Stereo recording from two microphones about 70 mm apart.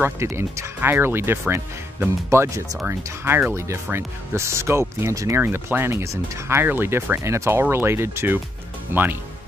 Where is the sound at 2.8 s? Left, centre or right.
Right.